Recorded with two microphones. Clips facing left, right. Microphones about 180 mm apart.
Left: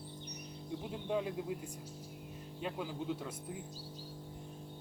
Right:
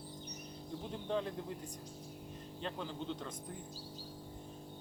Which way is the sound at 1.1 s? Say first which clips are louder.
Left 2 dB; 10° left (ahead or behind).